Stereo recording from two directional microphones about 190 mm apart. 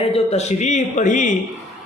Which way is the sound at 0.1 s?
35° left (ahead or behind).